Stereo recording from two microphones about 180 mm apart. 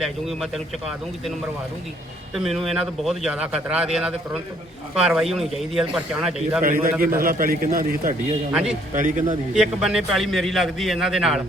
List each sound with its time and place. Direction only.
0.0 s a man's voice: centre (ahead or behind)
2.3 s a man's voice: centre (ahead or behind)
6.6 s a man's voice: 50° right (ahead or behind)
9.6 s a man's voice: 5° right (ahead or behind)